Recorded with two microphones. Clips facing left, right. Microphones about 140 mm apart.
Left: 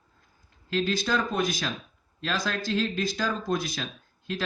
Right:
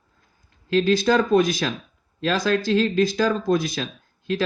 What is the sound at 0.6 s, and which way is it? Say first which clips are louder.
Speech: right 8 dB; 90° right.